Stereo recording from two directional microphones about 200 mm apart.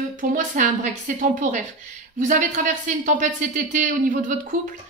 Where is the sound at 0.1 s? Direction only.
40° right (ahead or behind).